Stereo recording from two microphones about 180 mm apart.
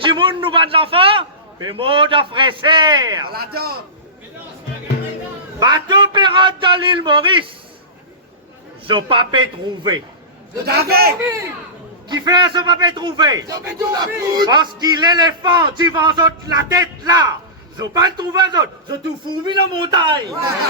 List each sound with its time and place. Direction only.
0.0 s a man's voice: 30° right (ahead or behind)
3.3 s a man's voice: 60° right (ahead or behind)
5.5 s a man's voice: 25° right (ahead or behind)
8.9 s a man's voice: 30° right (ahead or behind)
10.7 s a man's voice: 60° right (ahead or behind)
12.0 s a man's voice: 25° right (ahead or behind)